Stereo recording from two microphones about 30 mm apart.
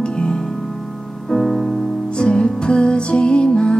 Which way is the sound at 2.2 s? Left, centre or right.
Left.